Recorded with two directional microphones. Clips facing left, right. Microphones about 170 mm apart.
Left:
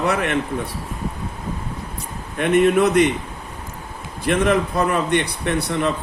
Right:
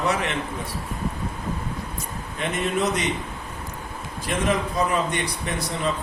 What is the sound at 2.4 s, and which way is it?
Speech, 60° left (ahead or behind).